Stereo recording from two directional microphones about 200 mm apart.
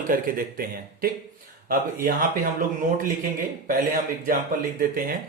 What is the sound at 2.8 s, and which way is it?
Speech, 40° right (ahead or behind).